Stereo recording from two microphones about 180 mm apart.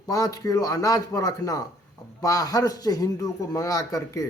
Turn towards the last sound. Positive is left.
turn(degrees=20)  # may be behind; listen again after turning